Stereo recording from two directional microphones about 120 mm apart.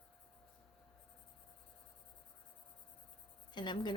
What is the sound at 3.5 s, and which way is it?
Speech, 40° left (ahead or behind).